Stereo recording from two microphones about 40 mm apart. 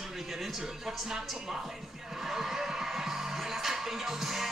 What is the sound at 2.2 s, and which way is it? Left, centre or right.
Music, centre.